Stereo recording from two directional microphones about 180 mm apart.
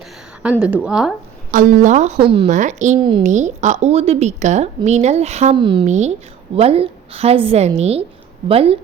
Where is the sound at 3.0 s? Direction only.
25° right (ahead or behind).